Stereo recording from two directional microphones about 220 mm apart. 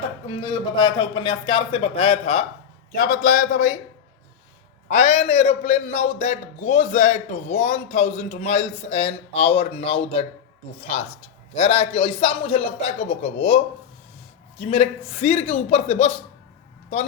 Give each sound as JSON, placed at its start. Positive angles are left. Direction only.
{"t": 0.3, "sound": "a man's voice", "side_deg": 20}
{"t": 4.9, "sound": "a man's voice", "side_deg": 30}
{"t": 14.6, "sound": "a man's voice", "side_deg": 25}